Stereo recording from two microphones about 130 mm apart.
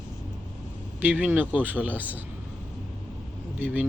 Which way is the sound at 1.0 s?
10° right (ahead or behind).